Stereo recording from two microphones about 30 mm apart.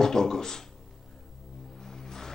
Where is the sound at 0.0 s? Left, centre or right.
Centre.